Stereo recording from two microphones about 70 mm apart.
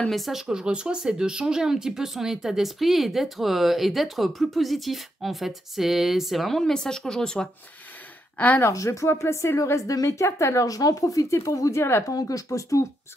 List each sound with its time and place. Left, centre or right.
0.1 s speech: centre
8.4 s speech: left
8.6 s a woman's voice: left